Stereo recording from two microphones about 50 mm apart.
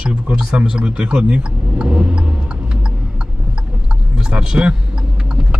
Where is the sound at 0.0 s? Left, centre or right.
Centre.